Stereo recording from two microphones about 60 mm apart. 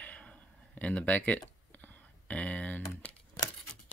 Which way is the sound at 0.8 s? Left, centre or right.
Left.